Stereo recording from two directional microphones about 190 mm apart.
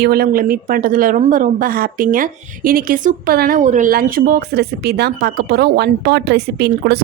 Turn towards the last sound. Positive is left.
turn(degrees=-55)  # may be behind; listen again after turning